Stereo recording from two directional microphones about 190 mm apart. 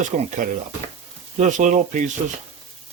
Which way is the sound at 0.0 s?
40° right (ahead or behind).